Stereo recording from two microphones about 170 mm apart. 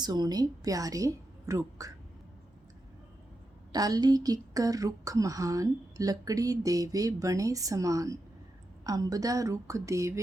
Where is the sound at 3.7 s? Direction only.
20° right (ahead or behind).